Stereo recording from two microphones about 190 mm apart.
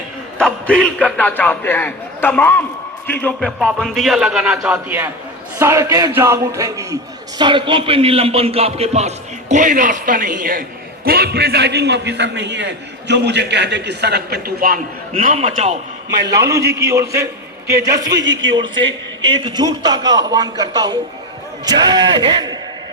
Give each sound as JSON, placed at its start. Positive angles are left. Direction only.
{"t": 0.3, "sound": "a man's voice", "side_deg": 5}
{"t": 16.4, "sound": "a man's voice", "side_deg": -15}
{"t": 18.0, "sound": "a man's voice", "side_deg": -70}
{"t": 19.3, "sound": "a man's voice", "side_deg": -25}